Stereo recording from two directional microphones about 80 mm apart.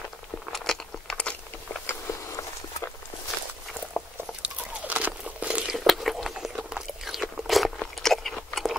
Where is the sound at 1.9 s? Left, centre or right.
Left.